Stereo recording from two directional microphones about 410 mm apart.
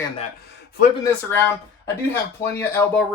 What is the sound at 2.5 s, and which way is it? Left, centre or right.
Speech, centre.